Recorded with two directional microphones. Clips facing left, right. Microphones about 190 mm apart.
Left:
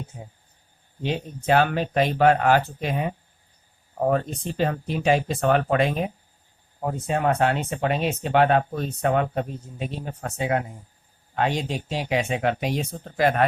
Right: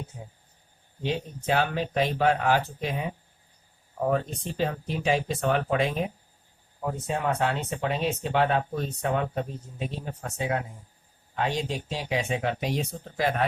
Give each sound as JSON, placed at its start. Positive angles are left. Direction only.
{"t": 1.0, "sound": "speech", "side_deg": 65}
{"t": 7.1, "sound": "speech", "side_deg": 65}